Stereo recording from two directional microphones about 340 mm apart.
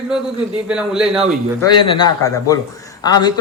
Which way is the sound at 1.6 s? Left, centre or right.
Centre.